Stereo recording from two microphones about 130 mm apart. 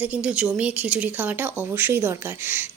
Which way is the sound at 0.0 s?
10° right (ahead or behind).